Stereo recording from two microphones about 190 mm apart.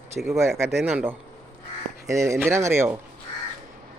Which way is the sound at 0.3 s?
15° right (ahead or behind).